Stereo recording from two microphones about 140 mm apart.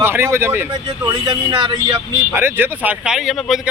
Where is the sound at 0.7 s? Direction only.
30° right (ahead or behind).